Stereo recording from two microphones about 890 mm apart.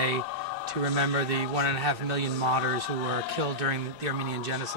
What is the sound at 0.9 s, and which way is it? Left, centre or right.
A man's voice, right.